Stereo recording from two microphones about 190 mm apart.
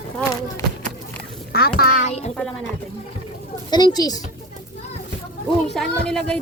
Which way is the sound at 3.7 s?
20° left (ahead or behind).